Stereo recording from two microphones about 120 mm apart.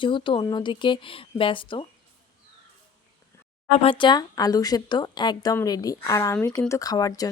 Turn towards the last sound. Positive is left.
turn(degrees=30)  # may be behind; listen again after turning